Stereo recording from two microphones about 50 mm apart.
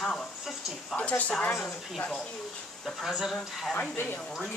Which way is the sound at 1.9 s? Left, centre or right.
Centre.